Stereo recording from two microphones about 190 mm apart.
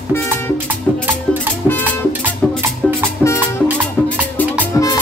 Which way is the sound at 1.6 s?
10° right (ahead or behind).